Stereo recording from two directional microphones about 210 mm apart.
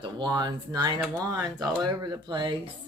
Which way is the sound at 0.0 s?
20° right (ahead or behind).